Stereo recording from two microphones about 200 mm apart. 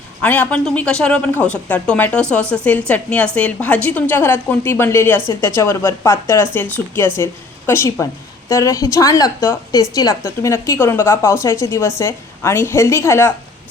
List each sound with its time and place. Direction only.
0.2 s a woman's voice: 10° left (ahead or behind)